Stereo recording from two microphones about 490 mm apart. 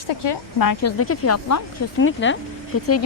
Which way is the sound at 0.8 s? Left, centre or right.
Left.